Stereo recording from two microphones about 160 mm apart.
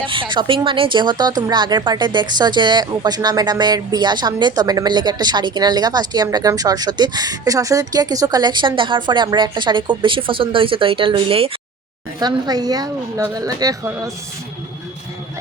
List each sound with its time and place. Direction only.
0.1 s a woman's voice: 30° right (ahead or behind)
12.2 s a woman's voice: 25° right (ahead or behind)